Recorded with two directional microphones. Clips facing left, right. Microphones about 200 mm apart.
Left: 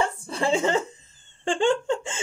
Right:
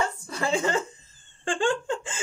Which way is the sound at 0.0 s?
30° left (ahead or behind).